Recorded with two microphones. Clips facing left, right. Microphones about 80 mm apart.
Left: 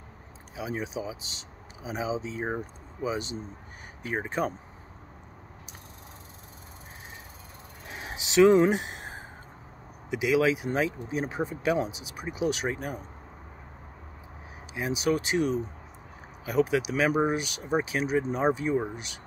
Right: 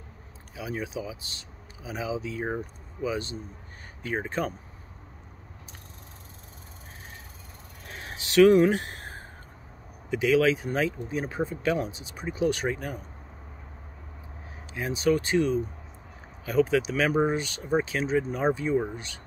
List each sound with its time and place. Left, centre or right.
0.6 s speech: left
7.8 s a sound: centre
10.0 s speech: centre
14.7 s speech: centre